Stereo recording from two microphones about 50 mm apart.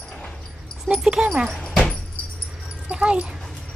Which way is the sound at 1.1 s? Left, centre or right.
Centre.